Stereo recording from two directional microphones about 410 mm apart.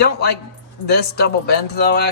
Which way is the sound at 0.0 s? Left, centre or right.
Left.